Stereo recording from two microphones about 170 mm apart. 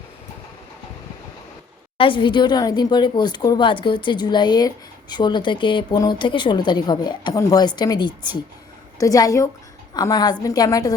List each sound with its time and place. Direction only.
2.0 s speech: 30° left (ahead or behind)